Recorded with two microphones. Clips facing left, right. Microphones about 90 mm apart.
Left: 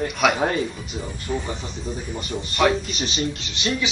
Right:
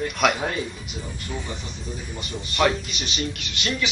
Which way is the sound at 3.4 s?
20° left (ahead or behind).